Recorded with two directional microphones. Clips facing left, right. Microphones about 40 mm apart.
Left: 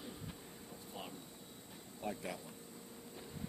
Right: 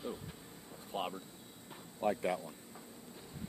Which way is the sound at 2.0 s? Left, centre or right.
Right.